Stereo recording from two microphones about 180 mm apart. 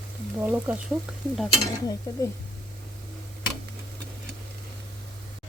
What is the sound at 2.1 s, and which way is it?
Speech, 20° left (ahead or behind).